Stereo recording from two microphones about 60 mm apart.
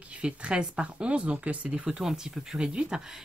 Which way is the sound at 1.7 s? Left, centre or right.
Centre.